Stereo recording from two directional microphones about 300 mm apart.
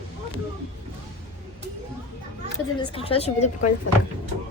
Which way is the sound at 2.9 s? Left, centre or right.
Centre.